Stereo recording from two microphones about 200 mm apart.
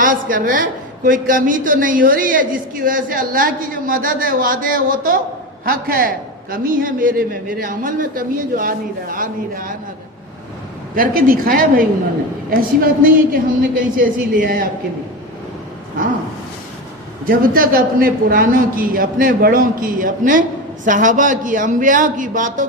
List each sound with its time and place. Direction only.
0.0 s a woman's voice: 40° right (ahead or behind)
10.9 s a woman's voice: 45° right (ahead or behind)
17.2 s a woman's voice: 45° right (ahead or behind)